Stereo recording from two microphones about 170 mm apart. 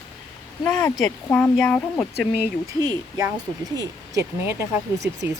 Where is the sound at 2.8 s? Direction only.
20° right (ahead or behind).